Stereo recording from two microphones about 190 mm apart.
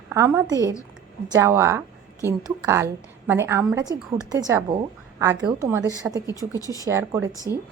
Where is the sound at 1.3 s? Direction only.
15° right (ahead or behind).